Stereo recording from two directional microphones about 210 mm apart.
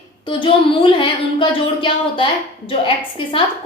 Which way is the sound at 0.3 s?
25° left (ahead or behind).